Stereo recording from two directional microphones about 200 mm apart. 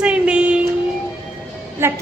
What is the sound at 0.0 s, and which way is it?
Music, 5° right (ahead or behind).